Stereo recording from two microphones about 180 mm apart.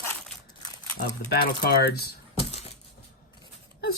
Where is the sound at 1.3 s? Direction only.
60° left (ahead or behind).